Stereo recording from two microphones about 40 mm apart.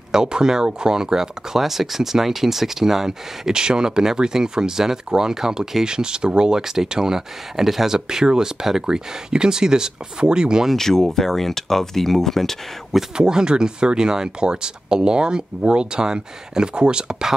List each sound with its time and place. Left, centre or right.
0.1 s speech: centre
10.8 s speech: centre
13.2 s speech: centre